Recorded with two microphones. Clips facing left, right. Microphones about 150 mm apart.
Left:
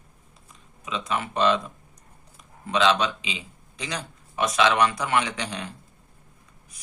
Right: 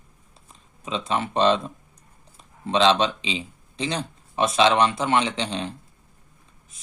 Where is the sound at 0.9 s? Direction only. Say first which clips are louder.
Right 3 dB; 30° right (ahead or behind).